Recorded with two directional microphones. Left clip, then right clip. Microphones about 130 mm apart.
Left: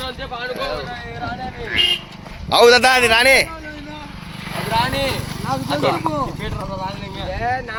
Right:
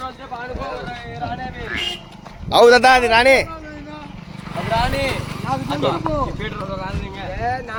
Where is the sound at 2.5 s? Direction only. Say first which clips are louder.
Even; 30° right (ahead or behind).